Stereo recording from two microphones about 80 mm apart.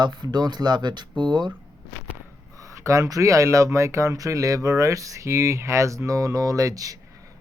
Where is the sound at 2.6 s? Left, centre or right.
Right.